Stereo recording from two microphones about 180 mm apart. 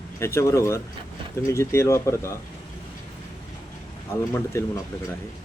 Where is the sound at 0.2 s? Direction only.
15° left (ahead or behind).